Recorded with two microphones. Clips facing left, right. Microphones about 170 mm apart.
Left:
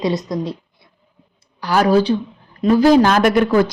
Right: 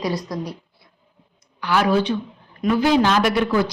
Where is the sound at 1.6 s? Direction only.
40° left (ahead or behind).